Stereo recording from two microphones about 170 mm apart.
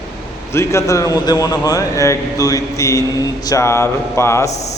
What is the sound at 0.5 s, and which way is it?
A man's voice, 15° left (ahead or behind).